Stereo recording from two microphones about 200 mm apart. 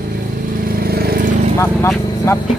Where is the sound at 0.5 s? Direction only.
45° right (ahead or behind).